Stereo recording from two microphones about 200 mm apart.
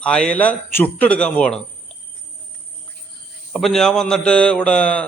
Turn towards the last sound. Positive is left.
turn(degrees=5)  # may be behind; listen again after turning